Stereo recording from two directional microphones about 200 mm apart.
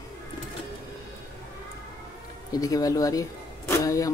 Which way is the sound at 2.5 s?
20° left (ahead or behind).